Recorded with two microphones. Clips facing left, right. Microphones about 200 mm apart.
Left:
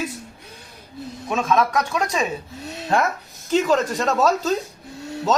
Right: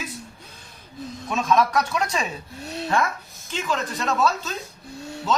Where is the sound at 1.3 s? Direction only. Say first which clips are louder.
Left 1 dB; 5° left (ahead or behind).